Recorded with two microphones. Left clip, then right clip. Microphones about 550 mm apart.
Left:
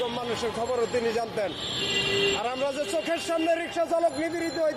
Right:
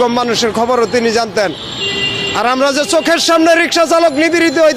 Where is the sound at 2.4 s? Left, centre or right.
Right.